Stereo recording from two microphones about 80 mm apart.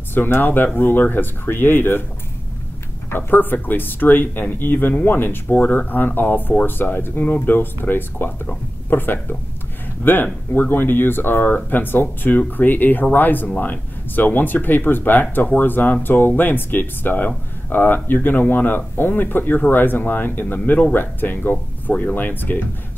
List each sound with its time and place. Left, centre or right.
0.1 s speech: left
3.1 s speech: left